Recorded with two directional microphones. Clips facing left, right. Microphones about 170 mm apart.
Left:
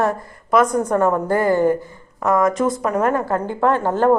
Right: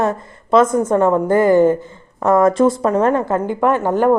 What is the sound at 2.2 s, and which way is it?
Speech, 30° right (ahead or behind).